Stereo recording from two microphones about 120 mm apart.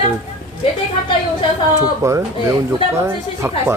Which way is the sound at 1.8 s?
25° right (ahead or behind).